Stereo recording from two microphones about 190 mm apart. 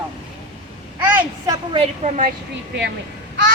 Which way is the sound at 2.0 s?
40° right (ahead or behind).